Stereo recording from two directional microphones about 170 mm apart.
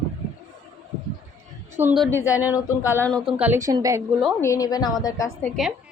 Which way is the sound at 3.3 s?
10° right (ahead or behind).